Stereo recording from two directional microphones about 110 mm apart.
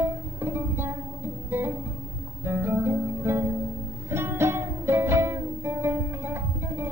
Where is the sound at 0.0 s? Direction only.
20° right (ahead or behind).